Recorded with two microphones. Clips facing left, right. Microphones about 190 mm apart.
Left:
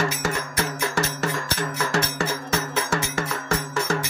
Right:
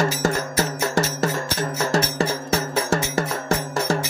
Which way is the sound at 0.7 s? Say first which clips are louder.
Right 3 dB; 45° right (ahead or behind).